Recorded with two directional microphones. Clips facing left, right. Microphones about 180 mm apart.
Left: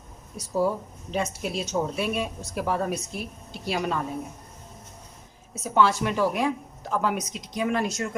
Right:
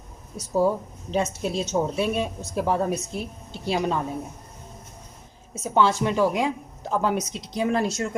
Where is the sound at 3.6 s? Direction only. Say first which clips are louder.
Right 3 dB; 25° right (ahead or behind).